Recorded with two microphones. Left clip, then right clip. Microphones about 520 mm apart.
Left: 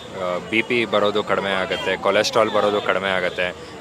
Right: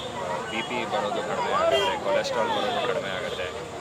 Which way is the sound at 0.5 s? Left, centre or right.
Left.